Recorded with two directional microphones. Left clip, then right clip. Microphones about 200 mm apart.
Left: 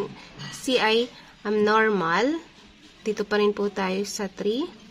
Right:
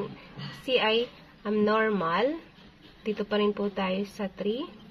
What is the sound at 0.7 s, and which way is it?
A woman's voice, 50° left (ahead or behind).